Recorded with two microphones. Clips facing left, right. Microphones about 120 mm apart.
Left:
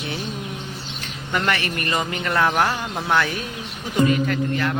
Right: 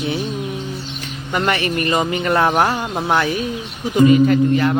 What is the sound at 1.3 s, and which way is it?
A man's voice, 20° right (ahead or behind).